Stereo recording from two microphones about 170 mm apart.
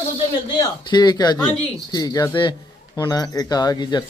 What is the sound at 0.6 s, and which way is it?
Speech, 25° left (ahead or behind).